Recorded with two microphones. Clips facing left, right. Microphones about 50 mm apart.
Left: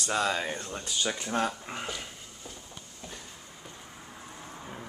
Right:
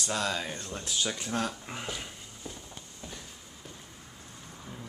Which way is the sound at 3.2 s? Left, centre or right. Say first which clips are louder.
Left 1 dB; centre.